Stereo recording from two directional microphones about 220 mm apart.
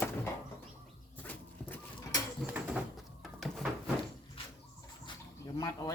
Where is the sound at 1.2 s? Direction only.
10° left (ahead or behind).